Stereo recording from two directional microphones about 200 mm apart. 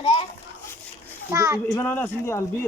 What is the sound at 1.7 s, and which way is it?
Speech, 10° left (ahead or behind).